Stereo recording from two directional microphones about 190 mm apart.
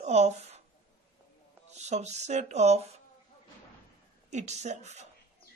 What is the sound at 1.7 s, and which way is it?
Speech, 35° right (ahead or behind).